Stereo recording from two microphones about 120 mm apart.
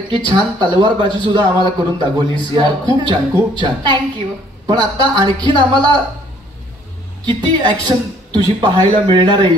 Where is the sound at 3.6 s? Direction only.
40° right (ahead or behind).